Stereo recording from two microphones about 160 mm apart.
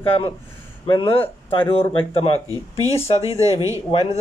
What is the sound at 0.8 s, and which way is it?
A man's voice, 30° left (ahead or behind).